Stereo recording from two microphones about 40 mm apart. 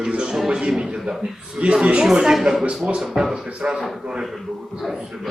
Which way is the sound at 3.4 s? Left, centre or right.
Right.